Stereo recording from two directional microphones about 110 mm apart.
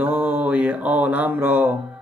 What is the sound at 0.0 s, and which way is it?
Mantra, 15° right (ahead or behind).